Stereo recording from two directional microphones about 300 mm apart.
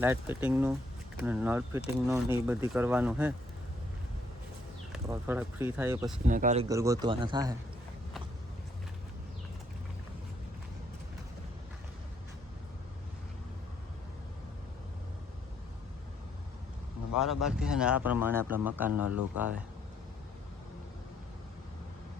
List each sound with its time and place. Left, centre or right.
0.0 s speech: centre
4.9 s speech: centre
6.2 s speech: right
6.7 s speech: centre
17.2 s speech: centre